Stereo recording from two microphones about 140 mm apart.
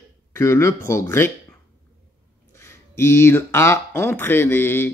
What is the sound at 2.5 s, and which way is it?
Speech, 20° left (ahead or behind).